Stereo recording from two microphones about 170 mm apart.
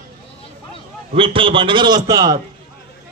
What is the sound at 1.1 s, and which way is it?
A man's voice, 30° right (ahead or behind).